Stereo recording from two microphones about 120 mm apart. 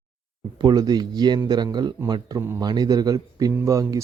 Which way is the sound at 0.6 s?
35° right (ahead or behind).